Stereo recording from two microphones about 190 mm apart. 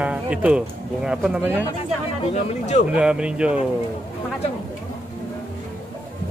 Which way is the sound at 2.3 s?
40° left (ahead or behind).